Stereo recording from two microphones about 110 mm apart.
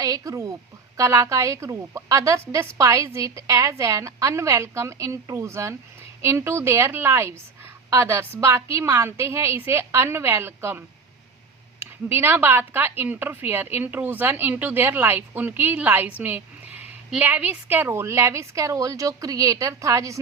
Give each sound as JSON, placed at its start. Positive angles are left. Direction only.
{"t": 0.0, "sound": "a woman's voice", "side_deg": -30}